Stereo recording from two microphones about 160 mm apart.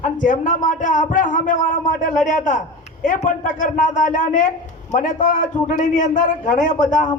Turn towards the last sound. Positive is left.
turn(degrees=50)  # may be behind; listen again after turning